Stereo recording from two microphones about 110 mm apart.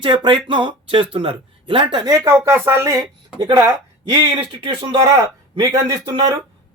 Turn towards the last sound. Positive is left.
turn(degrees=-30)  # may be behind; listen again after turning